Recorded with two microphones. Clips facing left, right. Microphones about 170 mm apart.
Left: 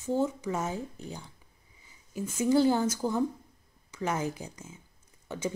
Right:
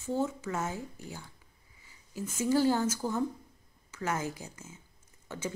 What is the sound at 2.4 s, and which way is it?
Speech, 15° left (ahead or behind).